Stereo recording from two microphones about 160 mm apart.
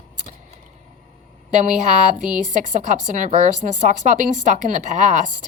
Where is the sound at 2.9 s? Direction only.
50° right (ahead or behind).